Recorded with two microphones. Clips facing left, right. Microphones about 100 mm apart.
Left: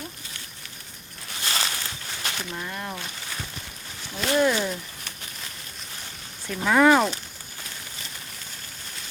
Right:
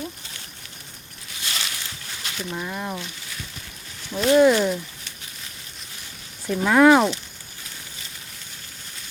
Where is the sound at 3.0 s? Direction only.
50° left (ahead or behind).